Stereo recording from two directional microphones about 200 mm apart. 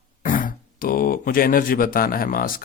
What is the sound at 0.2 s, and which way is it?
Speech, 45° left (ahead or behind).